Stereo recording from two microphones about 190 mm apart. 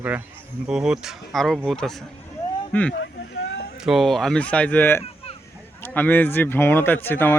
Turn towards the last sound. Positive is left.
turn(degrees=10)  # may be behind; listen again after turning